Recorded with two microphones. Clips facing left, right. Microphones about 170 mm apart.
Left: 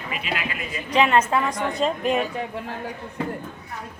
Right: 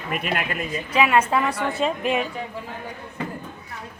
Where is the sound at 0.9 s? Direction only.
5° right (ahead or behind).